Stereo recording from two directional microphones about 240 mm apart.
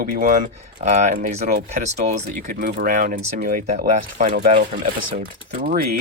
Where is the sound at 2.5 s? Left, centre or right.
Right.